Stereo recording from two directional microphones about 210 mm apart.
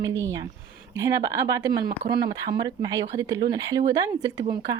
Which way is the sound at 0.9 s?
15° right (ahead or behind).